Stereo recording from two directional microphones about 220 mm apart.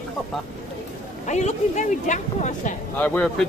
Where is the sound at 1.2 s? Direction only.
30° left (ahead or behind).